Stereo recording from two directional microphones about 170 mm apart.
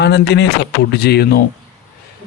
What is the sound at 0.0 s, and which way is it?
Speech, 85° left.